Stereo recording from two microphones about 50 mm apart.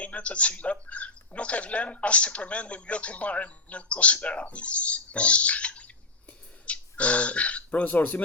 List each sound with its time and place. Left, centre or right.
0.0 s speech: left